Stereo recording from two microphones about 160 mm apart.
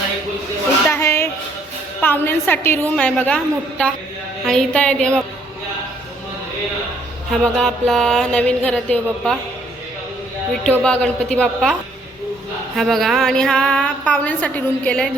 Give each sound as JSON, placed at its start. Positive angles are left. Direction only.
{"t": 0.9, "sound": "a sound", "side_deg": 15}
{"t": 2.0, "sound": "a woman's voice", "side_deg": 10}
{"t": 7.5, "sound": "a woman's voice", "side_deg": 5}
{"t": 10.7, "sound": "a woman's voice", "side_deg": 5}